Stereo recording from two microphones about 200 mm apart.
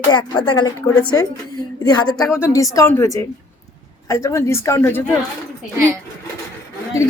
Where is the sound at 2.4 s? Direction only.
15° left (ahead or behind).